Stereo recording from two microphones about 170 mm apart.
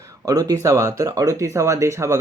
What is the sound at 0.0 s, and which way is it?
Speech, 20° right (ahead or behind).